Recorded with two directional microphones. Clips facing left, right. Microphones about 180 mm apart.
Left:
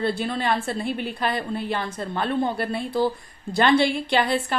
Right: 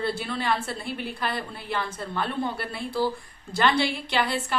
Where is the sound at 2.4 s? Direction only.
45° left (ahead or behind).